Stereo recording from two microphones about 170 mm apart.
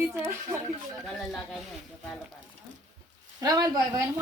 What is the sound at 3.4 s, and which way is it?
Speech, 20° right (ahead or behind).